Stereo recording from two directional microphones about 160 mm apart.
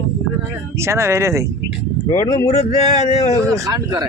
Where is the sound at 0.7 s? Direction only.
15° right (ahead or behind).